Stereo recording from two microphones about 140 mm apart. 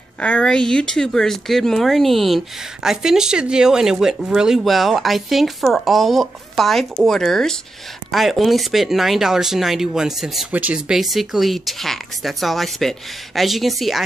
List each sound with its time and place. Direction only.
0.2 s speech: 10° left (ahead or behind)